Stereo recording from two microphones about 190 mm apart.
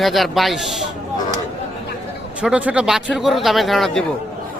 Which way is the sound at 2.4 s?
5° right (ahead or behind).